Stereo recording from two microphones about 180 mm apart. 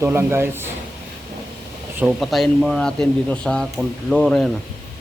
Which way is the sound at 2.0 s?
Centre (ahead or behind).